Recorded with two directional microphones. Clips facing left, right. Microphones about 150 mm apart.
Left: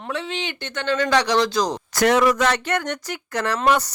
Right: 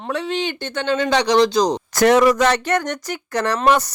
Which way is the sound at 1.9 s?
45° right (ahead or behind).